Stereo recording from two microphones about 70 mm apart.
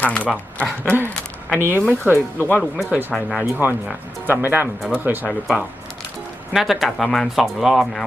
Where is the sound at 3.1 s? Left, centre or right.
Centre.